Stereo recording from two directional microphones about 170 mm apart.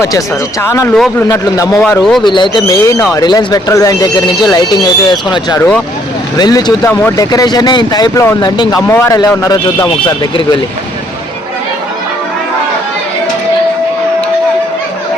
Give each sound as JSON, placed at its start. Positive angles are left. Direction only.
{"t": 0.6, "sound": "speech", "side_deg": 15}
{"t": 2.0, "sound": "speech", "side_deg": 0}
{"t": 2.2, "sound": "speech", "side_deg": 25}